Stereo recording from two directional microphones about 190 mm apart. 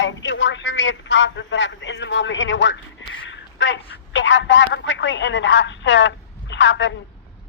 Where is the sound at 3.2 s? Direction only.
75° left (ahead or behind).